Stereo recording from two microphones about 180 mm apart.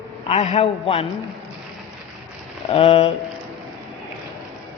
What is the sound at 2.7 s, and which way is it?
Speech, 35° left (ahead or behind).